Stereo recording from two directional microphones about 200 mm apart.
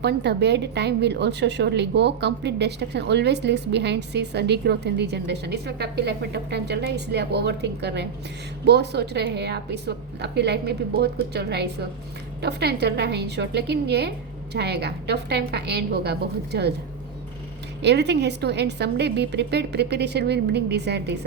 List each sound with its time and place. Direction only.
0.0 s a woman's voice: 55° right (ahead or behind)
17.8 s a woman's voice: 60° right (ahead or behind)